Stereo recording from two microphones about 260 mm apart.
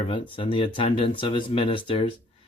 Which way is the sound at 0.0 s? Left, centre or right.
Left.